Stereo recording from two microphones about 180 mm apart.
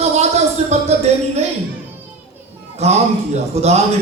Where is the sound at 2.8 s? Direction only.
35° right (ahead or behind).